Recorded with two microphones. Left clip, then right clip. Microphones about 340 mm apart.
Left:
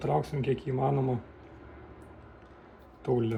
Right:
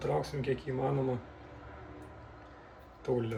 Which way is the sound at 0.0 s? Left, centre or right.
Centre.